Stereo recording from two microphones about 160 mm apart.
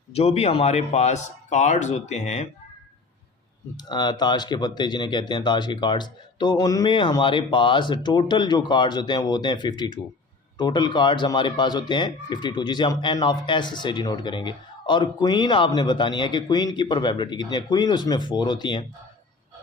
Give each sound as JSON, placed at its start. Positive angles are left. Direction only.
{"t": 0.1, "sound": "a man's voice", "side_deg": 40}
{"t": 3.8, "sound": "speech", "side_deg": 25}